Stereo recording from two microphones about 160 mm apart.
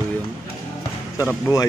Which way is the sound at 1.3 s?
20° left (ahead or behind).